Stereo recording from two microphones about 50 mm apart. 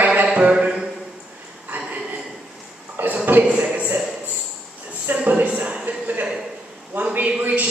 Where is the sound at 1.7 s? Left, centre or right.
Right.